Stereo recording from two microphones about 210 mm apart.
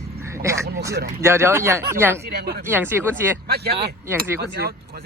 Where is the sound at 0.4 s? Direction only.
15° right (ahead or behind).